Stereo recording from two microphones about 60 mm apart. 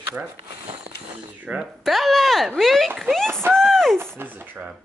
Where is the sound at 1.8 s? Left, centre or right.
Centre.